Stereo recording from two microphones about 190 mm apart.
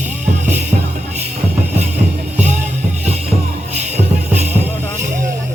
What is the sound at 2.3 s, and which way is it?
Music, 35° right (ahead or behind).